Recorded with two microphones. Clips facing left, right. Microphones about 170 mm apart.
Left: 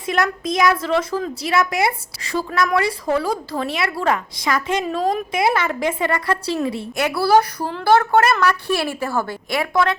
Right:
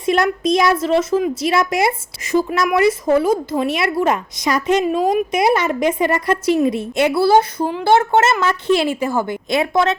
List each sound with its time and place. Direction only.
0.0 s a woman's voice: 25° right (ahead or behind)
4.9 s a woman's voice: 10° right (ahead or behind)
5.3 s a woman's voice: 20° right (ahead or behind)